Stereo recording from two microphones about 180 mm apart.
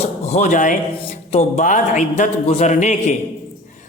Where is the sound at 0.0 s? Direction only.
40° left (ahead or behind).